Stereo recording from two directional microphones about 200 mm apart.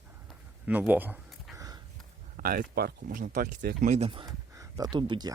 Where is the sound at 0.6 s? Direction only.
10° right (ahead or behind).